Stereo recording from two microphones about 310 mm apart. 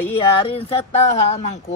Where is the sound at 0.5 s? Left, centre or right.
Centre.